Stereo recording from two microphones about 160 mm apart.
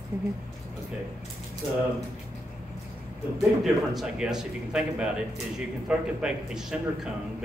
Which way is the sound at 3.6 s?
Centre (ahead or behind).